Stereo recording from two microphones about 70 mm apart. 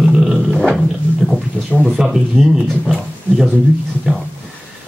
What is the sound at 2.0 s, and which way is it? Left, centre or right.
Speech, centre.